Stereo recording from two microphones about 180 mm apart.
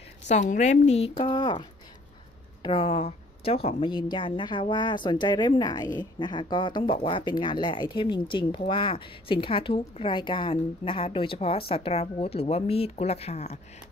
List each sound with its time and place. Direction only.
0.3 s speech: 40° left (ahead or behind)